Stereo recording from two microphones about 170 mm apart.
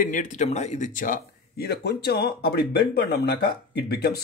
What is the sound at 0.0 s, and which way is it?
Speech, 50° left (ahead or behind).